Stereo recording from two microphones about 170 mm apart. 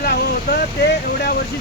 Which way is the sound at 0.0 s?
70° left (ahead or behind).